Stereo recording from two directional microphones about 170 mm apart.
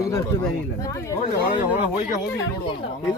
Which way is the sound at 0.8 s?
20° left (ahead or behind).